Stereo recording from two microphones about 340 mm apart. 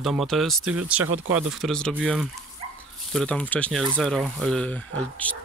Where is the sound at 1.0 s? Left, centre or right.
Right.